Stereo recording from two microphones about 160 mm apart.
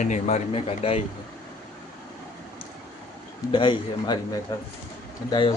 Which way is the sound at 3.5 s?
30° left (ahead or behind).